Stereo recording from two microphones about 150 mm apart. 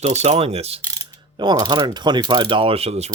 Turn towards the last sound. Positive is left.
turn(degrees=-45)  # may be behind; listen again after turning